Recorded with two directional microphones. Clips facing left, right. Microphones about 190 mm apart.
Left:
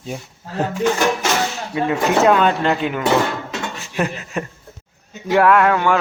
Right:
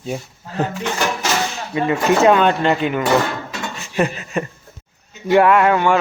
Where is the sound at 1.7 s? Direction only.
Centre (ahead or behind).